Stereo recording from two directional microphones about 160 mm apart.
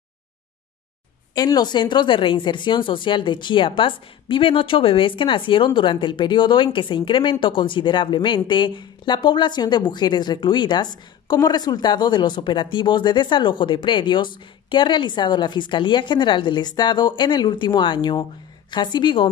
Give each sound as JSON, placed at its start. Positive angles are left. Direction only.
{"t": 1.3, "sound": "a woman's voice", "side_deg": 25}